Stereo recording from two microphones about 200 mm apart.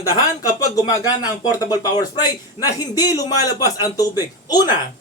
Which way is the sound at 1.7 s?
20° left (ahead or behind).